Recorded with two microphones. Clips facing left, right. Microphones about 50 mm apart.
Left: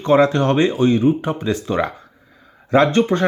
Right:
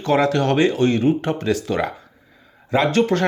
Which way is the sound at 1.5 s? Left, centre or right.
Left.